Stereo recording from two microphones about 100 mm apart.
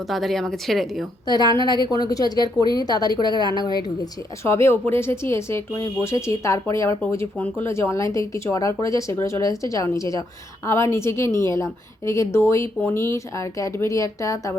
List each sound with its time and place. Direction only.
0.1 s a woman's voice: centre (ahead or behind)
1.6 s a woman's voice: 45° left (ahead or behind)
4.4 s a woman's voice: 25° left (ahead or behind)
7.3 s speech: 15° left (ahead or behind)
7.7 s a woman's voice: 30° left (ahead or behind)